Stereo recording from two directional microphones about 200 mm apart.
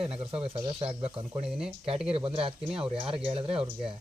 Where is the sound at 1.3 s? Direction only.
5° right (ahead or behind).